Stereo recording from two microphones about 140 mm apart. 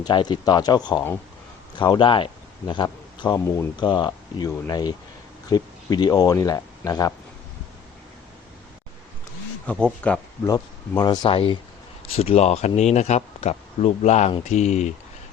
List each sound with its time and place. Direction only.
0.0 s speech: 30° left (ahead or behind)
9.6 s speech: 10° left (ahead or behind)
10.4 s speech: 30° left (ahead or behind); by 14.9 s 55° left (ahead or behind)